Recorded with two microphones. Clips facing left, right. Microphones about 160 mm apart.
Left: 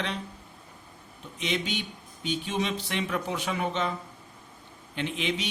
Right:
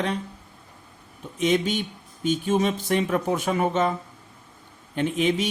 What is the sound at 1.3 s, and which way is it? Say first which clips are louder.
Speech: right 8 dB; 45° right (ahead or behind).